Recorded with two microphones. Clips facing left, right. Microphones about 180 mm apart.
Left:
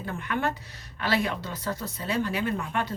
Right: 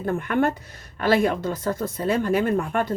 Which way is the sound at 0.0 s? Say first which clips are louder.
Right 7 dB; 50° right (ahead or behind).